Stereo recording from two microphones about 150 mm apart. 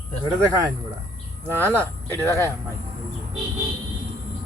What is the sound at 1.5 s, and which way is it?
Speech, 15° left (ahead or behind).